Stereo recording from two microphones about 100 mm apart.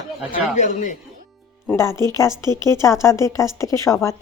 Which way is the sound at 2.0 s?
30° left (ahead or behind).